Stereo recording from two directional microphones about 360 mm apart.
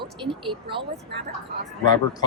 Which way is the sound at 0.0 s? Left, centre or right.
Centre.